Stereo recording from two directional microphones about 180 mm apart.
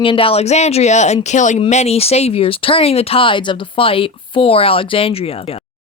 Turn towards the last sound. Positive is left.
turn(degrees=30)  # may be behind; listen again after turning